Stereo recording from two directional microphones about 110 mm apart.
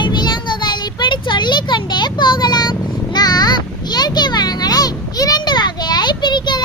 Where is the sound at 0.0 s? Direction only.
40° left (ahead or behind).